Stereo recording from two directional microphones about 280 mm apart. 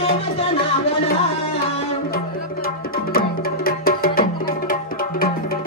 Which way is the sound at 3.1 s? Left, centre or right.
Left.